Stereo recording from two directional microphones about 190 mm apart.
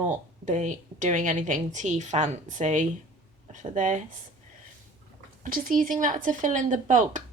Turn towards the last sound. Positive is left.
turn(degrees=-40)  # may be behind; listen again after turning